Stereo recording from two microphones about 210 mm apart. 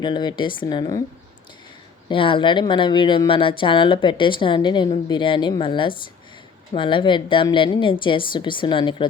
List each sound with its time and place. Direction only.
0.0 s a woman's voice: 20° left (ahead or behind)
2.0 s a woman's voice: 25° left (ahead or behind)